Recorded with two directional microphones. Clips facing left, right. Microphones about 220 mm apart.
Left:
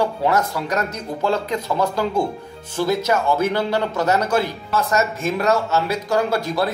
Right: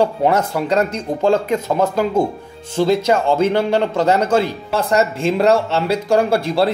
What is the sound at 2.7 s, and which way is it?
Speech, 25° right (ahead or behind).